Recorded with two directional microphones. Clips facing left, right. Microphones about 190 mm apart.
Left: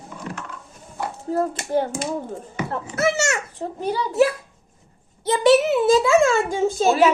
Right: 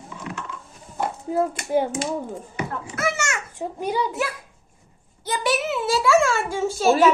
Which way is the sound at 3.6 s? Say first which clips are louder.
Right 4 dB; 10° right (ahead or behind).